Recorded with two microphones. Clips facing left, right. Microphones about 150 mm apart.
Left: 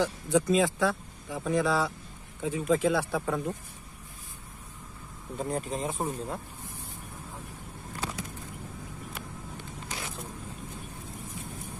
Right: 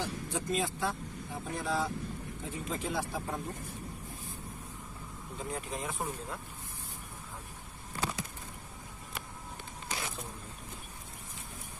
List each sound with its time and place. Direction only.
0.0 s speech: 90° left
5.5 s speech: 30° left (ahead or behind)